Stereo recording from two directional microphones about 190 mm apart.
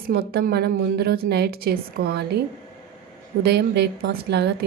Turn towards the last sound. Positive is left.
turn(degrees=-60)  # may be behind; listen again after turning